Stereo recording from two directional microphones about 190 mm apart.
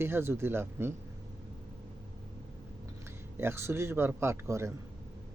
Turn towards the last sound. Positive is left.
turn(degrees=-15)  # may be behind; listen again after turning